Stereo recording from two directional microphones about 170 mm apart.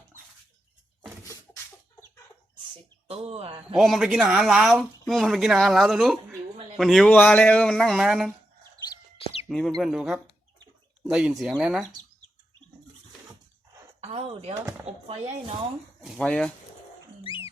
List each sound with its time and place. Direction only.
3.1 s speech: 35° right (ahead or behind)
3.8 s speech: centre (ahead or behind)
9.1 s chicken: 35° left (ahead or behind)
9.5 s speech: centre (ahead or behind)
14.0 s a sound: 35° right (ahead or behind)
14.9 s speech: 40° right (ahead or behind)
16.0 s speech: centre (ahead or behind)
17.2 s a sound: 30° left (ahead or behind)